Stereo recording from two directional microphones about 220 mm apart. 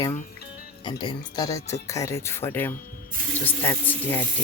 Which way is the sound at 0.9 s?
20° left (ahead or behind).